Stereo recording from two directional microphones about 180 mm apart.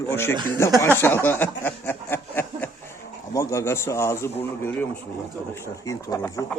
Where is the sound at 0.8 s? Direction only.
15° left (ahead or behind).